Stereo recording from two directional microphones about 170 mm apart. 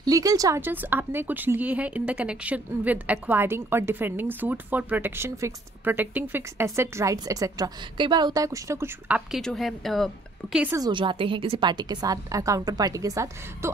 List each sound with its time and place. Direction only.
0.0 s speech: 20° right (ahead or behind)
9.4 s a woman's voice: centre (ahead or behind)
10.7 s a woman's voice: 25° right (ahead or behind)